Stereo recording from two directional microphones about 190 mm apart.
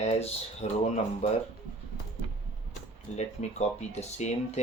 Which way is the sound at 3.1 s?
35° left (ahead or behind).